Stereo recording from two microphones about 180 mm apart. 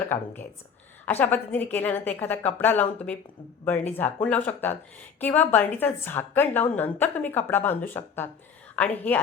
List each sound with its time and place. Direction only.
0.0 s a woman's voice: 10° left (ahead or behind)
3.9 s a woman's voice: 10° left (ahead or behind)